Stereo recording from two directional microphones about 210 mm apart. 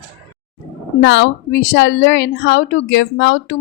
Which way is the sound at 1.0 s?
60° left (ahead or behind).